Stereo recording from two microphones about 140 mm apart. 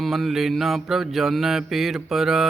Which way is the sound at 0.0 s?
Centre (ahead or behind).